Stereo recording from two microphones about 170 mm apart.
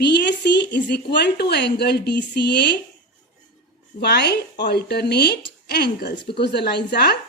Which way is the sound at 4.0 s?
75° left (ahead or behind).